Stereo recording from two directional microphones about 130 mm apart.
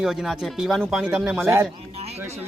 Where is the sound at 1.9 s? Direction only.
50° right (ahead or behind).